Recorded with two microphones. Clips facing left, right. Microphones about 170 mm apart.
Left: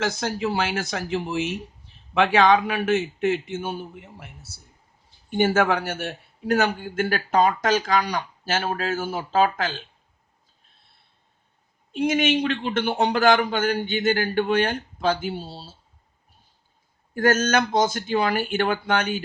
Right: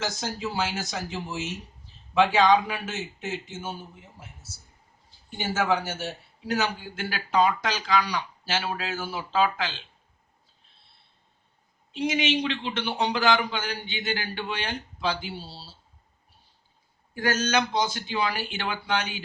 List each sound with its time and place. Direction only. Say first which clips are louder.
0.0 s a man's voice: left 6 dB; 60° left (ahead or behind)
11.9 s a man's voice: left 5 dB; 50° left (ahead or behind)
17.2 s a man's voice: left 5 dB; 50° left (ahead or behind)